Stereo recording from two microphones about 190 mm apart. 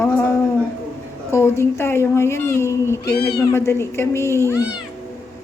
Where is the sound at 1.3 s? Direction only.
15° left (ahead or behind).